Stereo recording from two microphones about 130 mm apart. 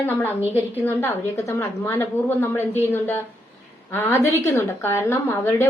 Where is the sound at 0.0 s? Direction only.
15° left (ahead or behind).